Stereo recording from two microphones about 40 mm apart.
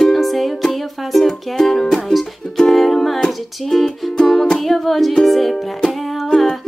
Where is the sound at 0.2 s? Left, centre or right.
Centre.